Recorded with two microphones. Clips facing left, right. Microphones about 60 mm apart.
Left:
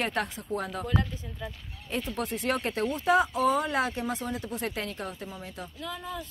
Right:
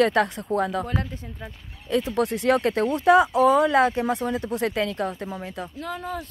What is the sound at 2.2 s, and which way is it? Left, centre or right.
Speech, right.